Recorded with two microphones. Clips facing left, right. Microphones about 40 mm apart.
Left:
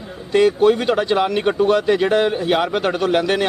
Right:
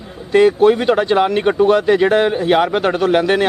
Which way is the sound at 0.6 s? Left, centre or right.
Right.